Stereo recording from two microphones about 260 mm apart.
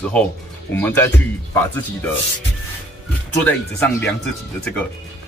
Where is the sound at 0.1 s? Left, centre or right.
Centre.